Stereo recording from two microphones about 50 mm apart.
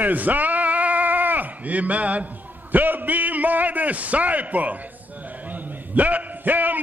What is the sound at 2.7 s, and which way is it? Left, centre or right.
A man's voice, right.